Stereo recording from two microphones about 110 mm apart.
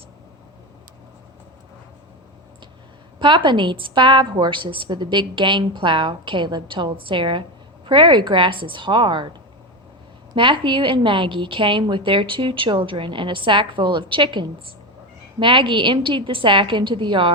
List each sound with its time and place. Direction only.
3.2 s a woman's voice: 45° right (ahead or behind)
10.3 s a woman's voice: 50° right (ahead or behind)